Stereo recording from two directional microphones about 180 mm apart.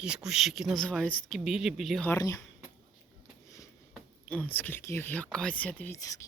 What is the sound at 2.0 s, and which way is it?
Speech, 15° left (ahead or behind).